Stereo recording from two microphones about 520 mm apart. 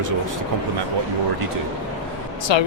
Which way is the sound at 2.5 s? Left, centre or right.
Left.